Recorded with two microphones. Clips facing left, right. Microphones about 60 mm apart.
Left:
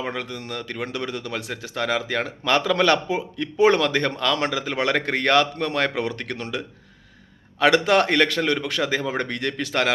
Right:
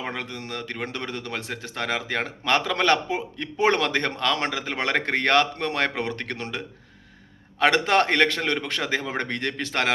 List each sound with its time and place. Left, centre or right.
0.1 s speech: right
7.6 s speech: right